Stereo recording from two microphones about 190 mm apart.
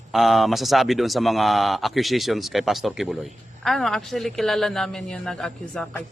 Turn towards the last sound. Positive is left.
turn(degrees=5)  # may be behind; listen again after turning